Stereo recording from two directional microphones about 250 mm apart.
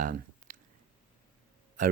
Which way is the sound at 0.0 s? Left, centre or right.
Right.